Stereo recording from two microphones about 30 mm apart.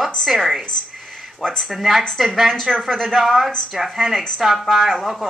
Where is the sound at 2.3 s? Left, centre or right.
Centre.